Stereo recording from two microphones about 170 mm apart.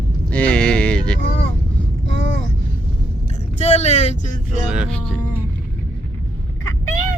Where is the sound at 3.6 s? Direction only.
40° left (ahead or behind).